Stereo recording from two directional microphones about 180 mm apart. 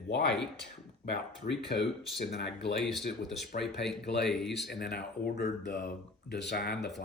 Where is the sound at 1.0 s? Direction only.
75° left (ahead or behind).